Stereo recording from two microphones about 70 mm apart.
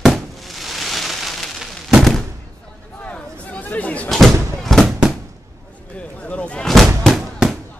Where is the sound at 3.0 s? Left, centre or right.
Centre.